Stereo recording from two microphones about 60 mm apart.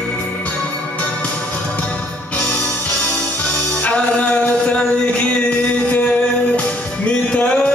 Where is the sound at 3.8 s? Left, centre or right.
Left.